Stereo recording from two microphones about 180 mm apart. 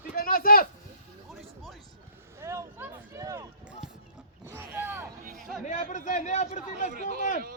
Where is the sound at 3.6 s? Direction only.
5° right (ahead or behind).